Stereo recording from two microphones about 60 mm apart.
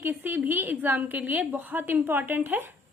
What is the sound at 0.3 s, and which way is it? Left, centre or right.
A woman's voice, right.